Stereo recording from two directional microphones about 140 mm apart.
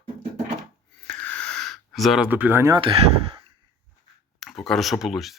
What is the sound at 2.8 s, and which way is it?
Speech, 40° right (ahead or behind).